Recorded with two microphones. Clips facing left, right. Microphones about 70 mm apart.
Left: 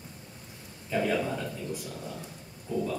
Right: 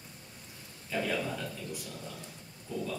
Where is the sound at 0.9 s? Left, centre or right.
Centre.